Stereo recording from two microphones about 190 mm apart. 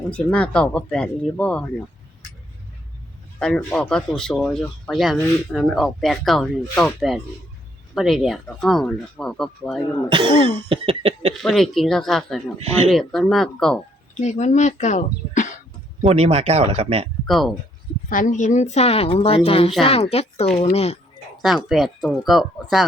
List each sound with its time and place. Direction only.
0.1 s speech: 5° left (ahead or behind)
3.4 s speech: 5° left (ahead or behind)
10.1 s cough: 25° right (ahead or behind)
11.4 s speech: centre (ahead or behind)
12.5 s speech: 30° right (ahead or behind)
12.9 s speech: centre (ahead or behind)
14.2 s a woman's voice: 35° left (ahead or behind)
16.0 s speech: 30° right (ahead or behind)
17.2 s speech: centre (ahead or behind)
18.1 s a woman's voice: 45° left (ahead or behind)
21.4 s speech: centre (ahead or behind)